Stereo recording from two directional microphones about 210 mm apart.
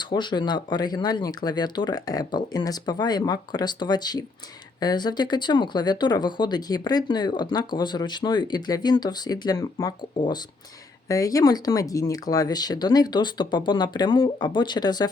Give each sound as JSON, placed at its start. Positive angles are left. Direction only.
{"t": 0.0, "sound": "speech", "side_deg": 20}